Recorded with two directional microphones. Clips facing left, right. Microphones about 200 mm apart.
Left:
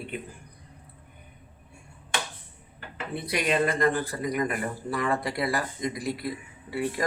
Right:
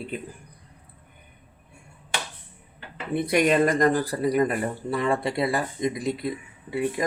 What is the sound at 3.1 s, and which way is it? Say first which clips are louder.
Speech: right 7 dB; 50° right (ahead or behind).